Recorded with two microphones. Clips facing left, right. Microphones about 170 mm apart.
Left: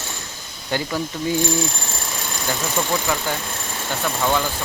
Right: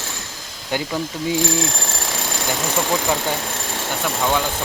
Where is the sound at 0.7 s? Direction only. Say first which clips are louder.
Even; 15° right (ahead or behind).